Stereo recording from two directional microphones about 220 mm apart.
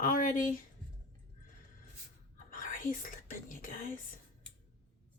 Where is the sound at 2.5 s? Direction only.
40° left (ahead or behind).